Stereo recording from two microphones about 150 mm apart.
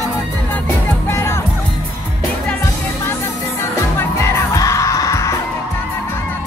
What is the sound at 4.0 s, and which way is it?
Music, 20° left (ahead or behind).